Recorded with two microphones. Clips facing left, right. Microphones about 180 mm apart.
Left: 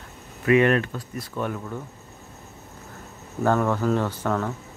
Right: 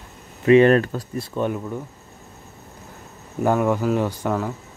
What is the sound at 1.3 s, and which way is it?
Speech, 20° right (ahead or behind).